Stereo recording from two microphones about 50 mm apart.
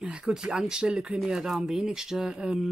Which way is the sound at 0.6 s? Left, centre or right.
Centre.